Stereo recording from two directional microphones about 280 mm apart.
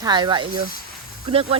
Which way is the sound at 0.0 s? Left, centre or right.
Centre.